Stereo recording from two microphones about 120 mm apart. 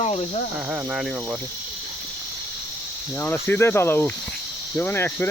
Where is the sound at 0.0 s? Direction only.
60° left (ahead or behind).